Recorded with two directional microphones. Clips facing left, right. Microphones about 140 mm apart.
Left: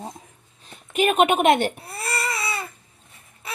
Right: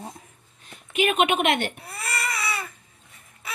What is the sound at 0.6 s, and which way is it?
Baby cry, 40° left (ahead or behind).